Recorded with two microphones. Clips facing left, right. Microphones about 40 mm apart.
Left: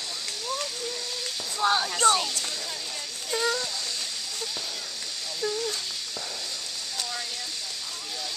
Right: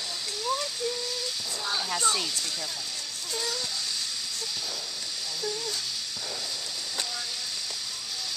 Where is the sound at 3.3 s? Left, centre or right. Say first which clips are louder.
Left 7 dB; left.